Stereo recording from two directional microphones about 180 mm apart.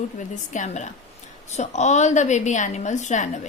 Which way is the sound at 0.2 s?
40° left (ahead or behind).